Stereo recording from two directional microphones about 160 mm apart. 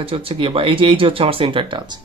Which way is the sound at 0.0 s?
35° right (ahead or behind).